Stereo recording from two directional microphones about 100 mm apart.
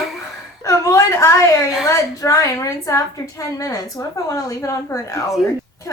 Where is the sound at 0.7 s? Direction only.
35° left (ahead or behind).